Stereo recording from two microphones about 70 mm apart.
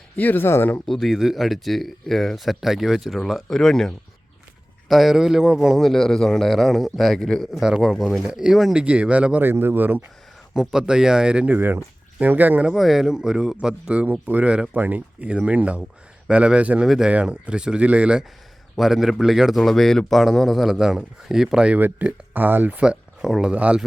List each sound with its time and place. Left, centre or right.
0.2 s speech: left
0.9 s speech: centre
7.5 s speech: centre
8.8 s speech: centre
9.4 s speech: right
10.5 s speech: centre
11.5 s speech: right
12.6 s speech: centre
14.7 s speech: right
16.8 s speech: centre
17.1 s speech: centre
18.8 s speech: centre
21.8 s speech: right
22.8 s speech: centre